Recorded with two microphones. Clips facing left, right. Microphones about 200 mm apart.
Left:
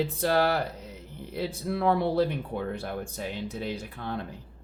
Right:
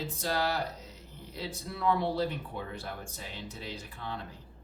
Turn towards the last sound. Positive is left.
turn(degrees=55)  # may be behind; listen again after turning